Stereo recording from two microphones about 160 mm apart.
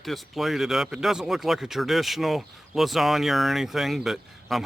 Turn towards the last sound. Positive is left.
turn(degrees=0)  # may be behind; listen again after turning